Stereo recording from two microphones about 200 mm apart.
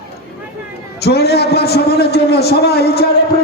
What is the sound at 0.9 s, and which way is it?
A man's voice, 55° left (ahead or behind).